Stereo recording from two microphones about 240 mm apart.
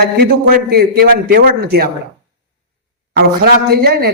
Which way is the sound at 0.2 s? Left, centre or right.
Right.